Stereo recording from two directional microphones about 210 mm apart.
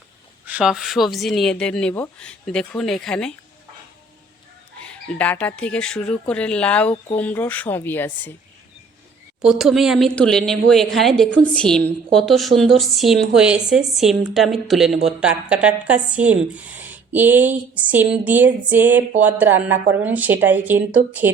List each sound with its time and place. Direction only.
0.4 s speech: 5° right (ahead or behind)
4.8 s speech: 5° left (ahead or behind)
9.4 s speech: centre (ahead or behind)